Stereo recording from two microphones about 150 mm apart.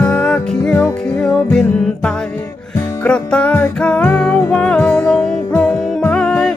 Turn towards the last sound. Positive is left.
turn(degrees=5)  # may be behind; listen again after turning